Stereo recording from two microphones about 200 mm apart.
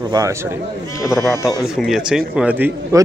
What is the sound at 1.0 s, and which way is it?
Speech, 15° left (ahead or behind).